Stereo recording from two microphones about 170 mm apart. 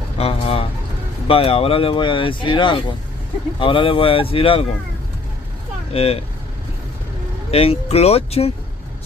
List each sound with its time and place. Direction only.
0.2 s pigeon: 35° left (ahead or behind)
1.2 s speech: 35° left (ahead or behind)
5.9 s speech: 35° left (ahead or behind)
7.5 s speech: 35° left (ahead or behind)